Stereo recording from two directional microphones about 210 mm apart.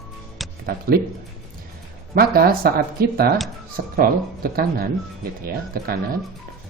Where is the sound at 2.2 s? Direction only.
45° right (ahead or behind).